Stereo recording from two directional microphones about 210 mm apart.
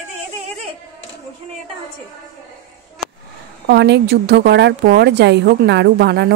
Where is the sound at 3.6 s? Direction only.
55° right (ahead or behind).